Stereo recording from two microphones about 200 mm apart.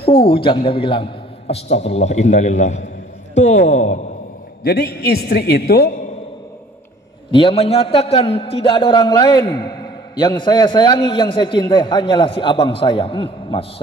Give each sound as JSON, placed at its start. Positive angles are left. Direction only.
{"t": 0.0, "sound": "a man's voice", "side_deg": 25}
{"t": 4.6, "sound": "a man's voice", "side_deg": 50}
{"t": 7.2, "sound": "a man's voice", "side_deg": 25}